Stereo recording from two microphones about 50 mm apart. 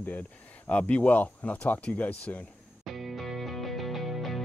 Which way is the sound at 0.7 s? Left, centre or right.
Left.